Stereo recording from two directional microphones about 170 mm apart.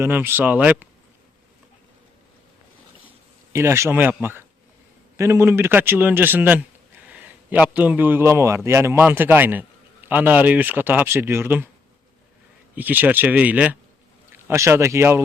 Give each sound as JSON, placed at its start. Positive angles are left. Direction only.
{"t": 0.0, "sound": "a man's voice", "side_deg": -10}
{"t": 3.5, "sound": "a man's voice", "side_deg": -15}
{"t": 12.7, "sound": "a man's voice", "side_deg": -10}